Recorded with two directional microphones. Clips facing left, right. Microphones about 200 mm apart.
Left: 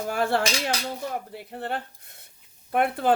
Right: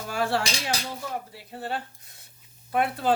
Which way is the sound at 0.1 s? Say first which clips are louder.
Left 2 dB; 55° left (ahead or behind).